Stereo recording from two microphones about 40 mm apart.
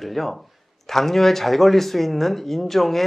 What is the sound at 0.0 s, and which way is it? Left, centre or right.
Speech, centre.